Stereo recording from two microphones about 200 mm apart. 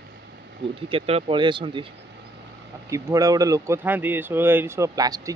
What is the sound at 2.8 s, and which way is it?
Speech, 15° right (ahead or behind).